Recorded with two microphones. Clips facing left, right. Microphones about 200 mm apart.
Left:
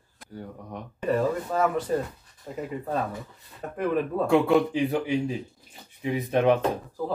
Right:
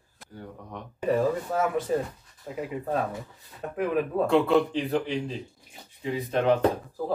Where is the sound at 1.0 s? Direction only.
10° right (ahead or behind).